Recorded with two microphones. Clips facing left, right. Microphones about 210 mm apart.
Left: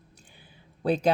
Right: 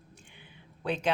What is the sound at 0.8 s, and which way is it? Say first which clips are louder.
Speech: left 7 dB; 40° left (ahead or behind).